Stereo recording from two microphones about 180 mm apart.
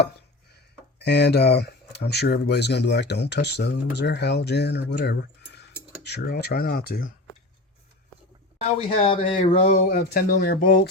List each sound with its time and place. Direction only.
0.9 s speech: 70° left (ahead or behind)
9.0 s speech: 30° left (ahead or behind)
9.4 s a sound: 35° left (ahead or behind)
9.9 s speech: 55° left (ahead or behind)